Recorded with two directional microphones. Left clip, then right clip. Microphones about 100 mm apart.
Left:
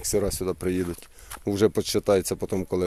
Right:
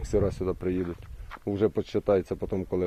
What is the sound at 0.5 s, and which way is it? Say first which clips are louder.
Speech: left 3 dB; 65° left (ahead or behind).